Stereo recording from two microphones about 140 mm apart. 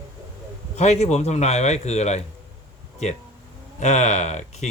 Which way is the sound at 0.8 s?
55° left (ahead or behind).